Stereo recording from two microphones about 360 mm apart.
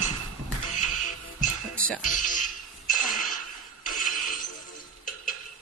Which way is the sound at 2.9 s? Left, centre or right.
Left.